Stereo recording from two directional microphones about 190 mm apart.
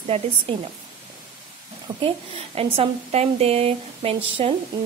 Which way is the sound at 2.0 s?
30° right (ahead or behind).